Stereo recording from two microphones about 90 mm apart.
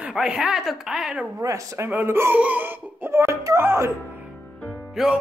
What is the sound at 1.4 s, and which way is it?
Speech, 35° right (ahead or behind).